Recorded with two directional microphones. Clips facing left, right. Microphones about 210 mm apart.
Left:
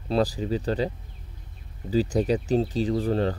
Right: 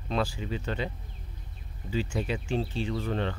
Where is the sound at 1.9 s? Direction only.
40° left (ahead or behind).